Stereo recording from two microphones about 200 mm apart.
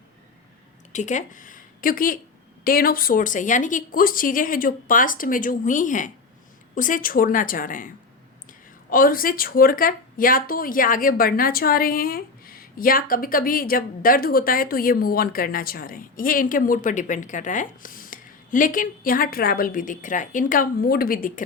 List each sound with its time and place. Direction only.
0.9 s speech: 35° left (ahead or behind)